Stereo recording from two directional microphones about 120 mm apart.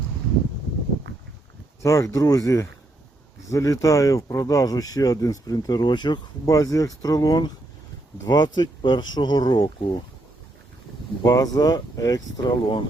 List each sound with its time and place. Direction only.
1.8 s speech: 25° left (ahead or behind)
11.2 s speech: 30° left (ahead or behind)